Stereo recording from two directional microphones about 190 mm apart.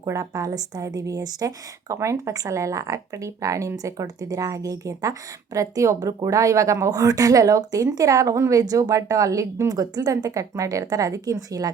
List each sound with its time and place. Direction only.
0.0 s a woman's voice: 15° right (ahead or behind)